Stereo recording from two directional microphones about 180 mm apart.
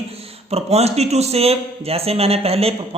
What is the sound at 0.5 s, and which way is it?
A man's voice, 35° right (ahead or behind).